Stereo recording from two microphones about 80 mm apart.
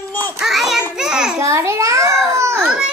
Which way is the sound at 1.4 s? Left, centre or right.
Right.